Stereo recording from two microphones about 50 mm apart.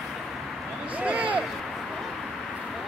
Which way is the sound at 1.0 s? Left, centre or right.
Right.